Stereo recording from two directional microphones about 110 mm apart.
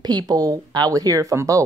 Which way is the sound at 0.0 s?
35° right (ahead or behind).